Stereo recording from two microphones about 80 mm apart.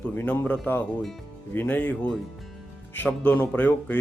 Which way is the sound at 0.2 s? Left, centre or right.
Left.